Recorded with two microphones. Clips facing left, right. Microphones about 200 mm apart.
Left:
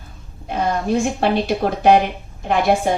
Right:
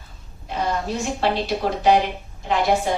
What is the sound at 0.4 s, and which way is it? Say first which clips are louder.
A woman's voice: left 4 dB; 55° left (ahead or behind).